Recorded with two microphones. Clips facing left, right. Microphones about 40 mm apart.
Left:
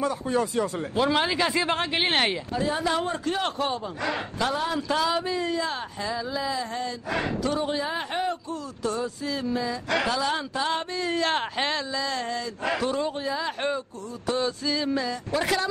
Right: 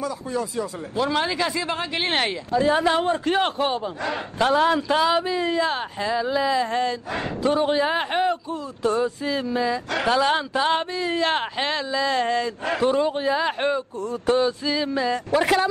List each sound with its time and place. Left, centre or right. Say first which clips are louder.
0.0 s speech: left 2 dB; left
0.9 s speech: right 1 dB; centre
1.6 s speech: left 1 dB; left
2.5 s a man's voice: right 7 dB; right
2.8 s a man's voice: right 5 dB; right
4.4 s a man's voice: right 9 dB; right
4.7 s a man's voice: right 5 dB; right
7.1 s speech: right 3 dB; right
9.9 s speech: right 5 dB; right
11.0 s speech: right 3 dB; centre
11.9 s speech: right 7 dB; right
12.7 s a man's voice: right 8 dB; right
13.6 s a man's voice: right 5 dB; right